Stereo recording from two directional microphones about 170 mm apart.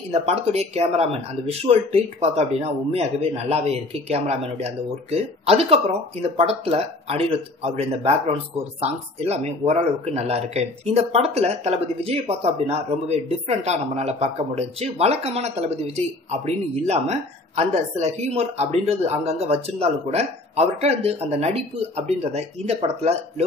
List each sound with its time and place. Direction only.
0.1 s speech: 40° right (ahead or behind)